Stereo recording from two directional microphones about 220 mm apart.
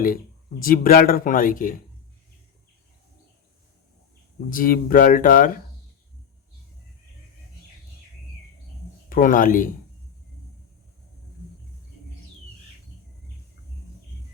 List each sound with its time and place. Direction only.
0.6 s speech: 40° left (ahead or behind)
4.4 s speech: 40° left (ahead or behind)
9.0 s speech: 40° left (ahead or behind)